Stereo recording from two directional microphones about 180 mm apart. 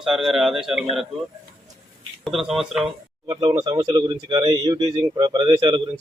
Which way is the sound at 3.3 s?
20° right (ahead or behind).